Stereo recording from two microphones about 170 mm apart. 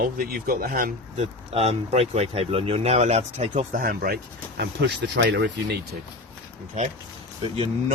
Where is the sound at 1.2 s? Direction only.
40° right (ahead or behind).